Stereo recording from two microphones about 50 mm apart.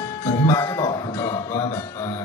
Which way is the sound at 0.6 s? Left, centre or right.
Left.